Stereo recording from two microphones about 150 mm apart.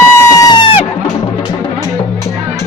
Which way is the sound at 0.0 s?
20° left (ahead or behind).